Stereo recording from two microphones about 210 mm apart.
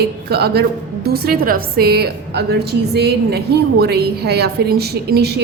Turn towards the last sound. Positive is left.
turn(degrees=-50)  # may be behind; listen again after turning